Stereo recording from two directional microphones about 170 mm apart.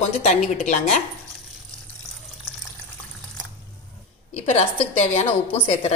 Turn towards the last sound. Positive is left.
turn(degrees=40)  # may be behind; listen again after turning